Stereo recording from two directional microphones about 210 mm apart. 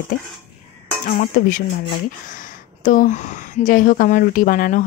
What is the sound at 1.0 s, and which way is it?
Speech, 40° left (ahead or behind).